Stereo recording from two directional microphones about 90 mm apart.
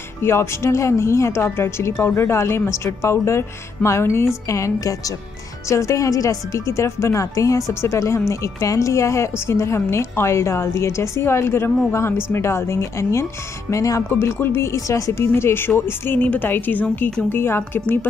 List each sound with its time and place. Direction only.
0.2 s a woman's voice: 30° left (ahead or behind)